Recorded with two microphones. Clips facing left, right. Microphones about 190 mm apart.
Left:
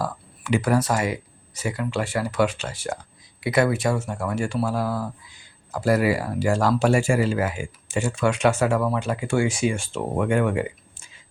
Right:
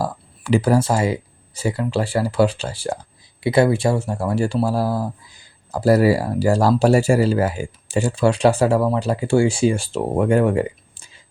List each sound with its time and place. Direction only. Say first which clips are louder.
0.0 s speech: right 4 dB; 35° right (ahead or behind)